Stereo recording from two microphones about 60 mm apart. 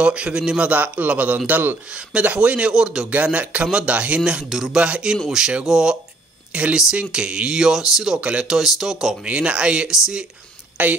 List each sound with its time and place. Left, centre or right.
0.0 s a man's voice: centre
1.9 s a man's voice: centre
2.7 s speech: centre
3.3 s a man's voice: right
4.2 s speech: centre
4.7 s speech: centre
5.1 s speech: centre
6.5 s a man's voice: right
8.5 s speech: centre
9.2 s a man's voice: centre